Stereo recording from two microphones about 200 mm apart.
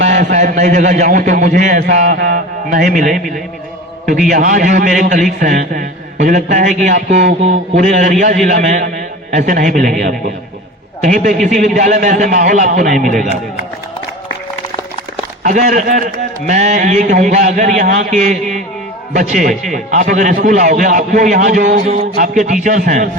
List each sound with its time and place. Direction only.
0.1 s a man's voice: 35° right (ahead or behind)
1.9 s mantra: 50° right (ahead or behind)
3.1 s a man's voice: centre (ahead or behind)
4.3 s a man's voice: 40° right (ahead or behind)
11.0 s a man's voice: 40° right (ahead or behind)
15.4 s a man's voice: 40° right (ahead or behind)